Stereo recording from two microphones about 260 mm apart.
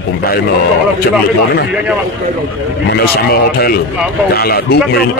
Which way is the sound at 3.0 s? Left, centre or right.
Left.